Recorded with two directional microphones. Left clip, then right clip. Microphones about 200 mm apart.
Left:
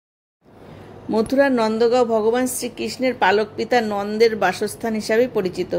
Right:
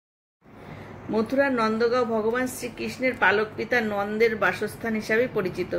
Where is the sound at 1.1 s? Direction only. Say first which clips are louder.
Left 6 dB; 45° left (ahead or behind).